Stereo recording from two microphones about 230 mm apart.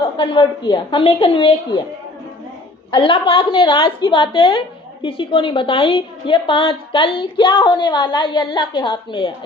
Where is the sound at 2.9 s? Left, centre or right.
Left.